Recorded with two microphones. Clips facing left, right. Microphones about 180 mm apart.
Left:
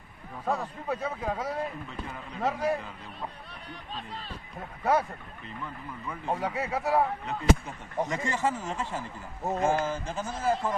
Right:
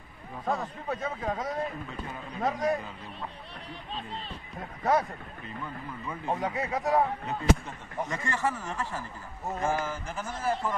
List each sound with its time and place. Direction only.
0.5 s speech: 5° left (ahead or behind)
4.6 s speech: 5° left (ahead or behind)
6.0 s speech: centre (ahead or behind)
8.0 s speech: 20° left (ahead or behind)